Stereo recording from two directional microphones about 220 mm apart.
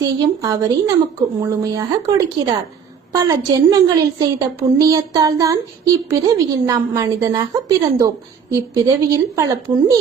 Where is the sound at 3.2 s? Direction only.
15° right (ahead or behind).